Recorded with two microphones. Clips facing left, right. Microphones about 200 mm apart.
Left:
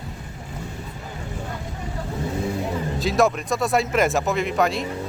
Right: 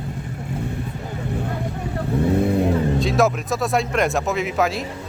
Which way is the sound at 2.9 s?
Centre (ahead or behind).